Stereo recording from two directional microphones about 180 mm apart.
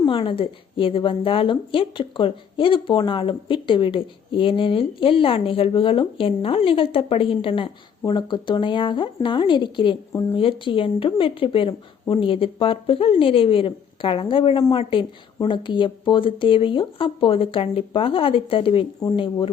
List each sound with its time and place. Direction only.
0.0 s a woman's voice: 30° left (ahead or behind)